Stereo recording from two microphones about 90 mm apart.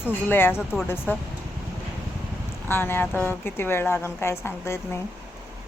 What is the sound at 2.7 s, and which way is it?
A woman's voice, 25° left (ahead or behind).